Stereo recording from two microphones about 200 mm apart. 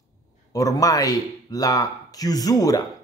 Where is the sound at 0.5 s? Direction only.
15° left (ahead or behind).